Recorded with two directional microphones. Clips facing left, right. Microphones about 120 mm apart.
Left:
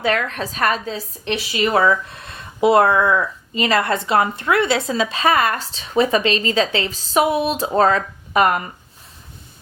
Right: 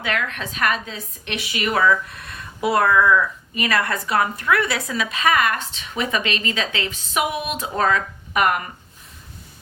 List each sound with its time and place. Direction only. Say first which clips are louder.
0.0 s a woman's voice: left 5 dB; 35° left (ahead or behind)